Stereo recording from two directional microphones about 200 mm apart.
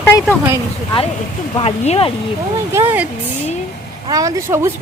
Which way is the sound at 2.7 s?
10° right (ahead or behind).